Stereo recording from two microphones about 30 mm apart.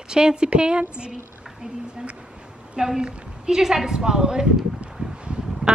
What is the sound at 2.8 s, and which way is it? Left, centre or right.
Speech, right.